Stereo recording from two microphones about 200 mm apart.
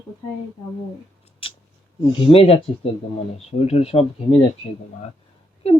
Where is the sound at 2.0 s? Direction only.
30° left (ahead or behind).